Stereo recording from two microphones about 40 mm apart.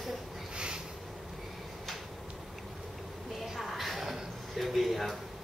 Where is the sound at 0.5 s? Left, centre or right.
Right.